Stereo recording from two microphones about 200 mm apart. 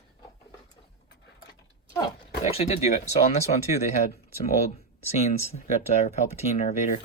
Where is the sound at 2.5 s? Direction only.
30° left (ahead or behind).